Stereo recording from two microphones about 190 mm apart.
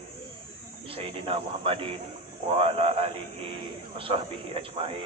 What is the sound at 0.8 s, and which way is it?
A man's voice, 30° right (ahead or behind).